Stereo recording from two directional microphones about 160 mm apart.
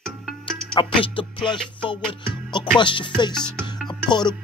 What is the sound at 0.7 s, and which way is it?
Music, 30° left (ahead or behind).